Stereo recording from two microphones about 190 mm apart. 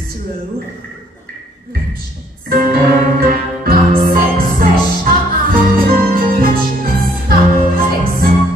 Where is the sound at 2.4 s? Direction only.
50° right (ahead or behind).